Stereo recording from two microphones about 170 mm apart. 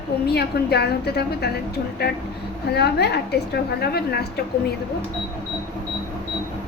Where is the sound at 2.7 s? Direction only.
75° left (ahead or behind).